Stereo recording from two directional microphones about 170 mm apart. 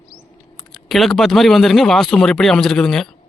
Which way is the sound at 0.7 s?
Centre (ahead or behind).